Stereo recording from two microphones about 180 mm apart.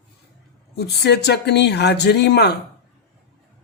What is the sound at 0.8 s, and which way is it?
Speech, 65° left (ahead or behind).